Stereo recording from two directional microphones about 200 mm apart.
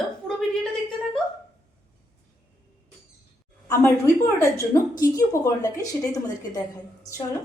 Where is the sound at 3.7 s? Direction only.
15° left (ahead or behind).